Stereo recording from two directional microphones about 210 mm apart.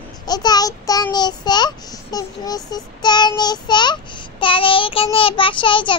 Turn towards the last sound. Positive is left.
turn(degrees=25)  # may be behind; listen again after turning